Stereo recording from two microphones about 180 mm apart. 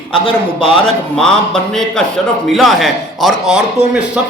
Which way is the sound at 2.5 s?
Centre (ahead or behind).